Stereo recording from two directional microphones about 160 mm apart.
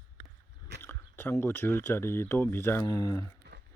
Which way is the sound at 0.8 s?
15° left (ahead or behind).